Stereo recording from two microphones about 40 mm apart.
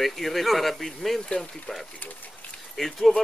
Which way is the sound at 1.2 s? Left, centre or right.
Centre.